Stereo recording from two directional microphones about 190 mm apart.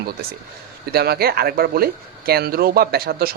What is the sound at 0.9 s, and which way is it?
Speech, 55° right (ahead or behind).